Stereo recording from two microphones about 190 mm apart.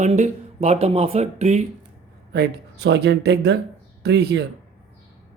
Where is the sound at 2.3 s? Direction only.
60° right (ahead or behind).